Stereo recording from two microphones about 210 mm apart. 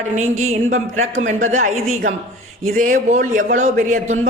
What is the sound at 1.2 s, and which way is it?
Speech, 35° right (ahead or behind).